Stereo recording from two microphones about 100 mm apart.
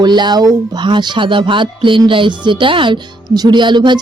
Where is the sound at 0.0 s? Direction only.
45° right (ahead or behind).